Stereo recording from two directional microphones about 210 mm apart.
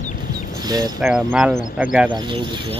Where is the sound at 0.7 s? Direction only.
20° right (ahead or behind).